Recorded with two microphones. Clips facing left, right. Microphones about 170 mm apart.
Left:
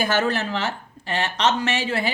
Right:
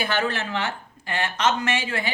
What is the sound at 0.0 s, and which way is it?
Speech, 45° left (ahead or behind).